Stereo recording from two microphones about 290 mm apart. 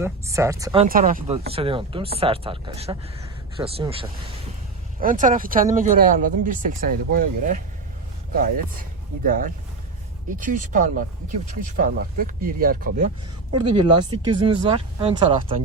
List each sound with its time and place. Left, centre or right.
0.0 s speech: centre
0.9 s speech: right
13.9 s speech: centre